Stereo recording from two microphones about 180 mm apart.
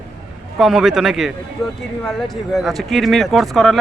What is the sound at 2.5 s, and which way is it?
Speech, centre (ahead or behind).